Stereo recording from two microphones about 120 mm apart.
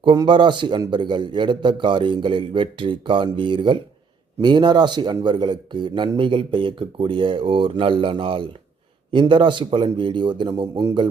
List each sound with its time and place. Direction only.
0.0 s a man's voice: 40° right (ahead or behind)
10.5 s a man's voice: 30° right (ahead or behind)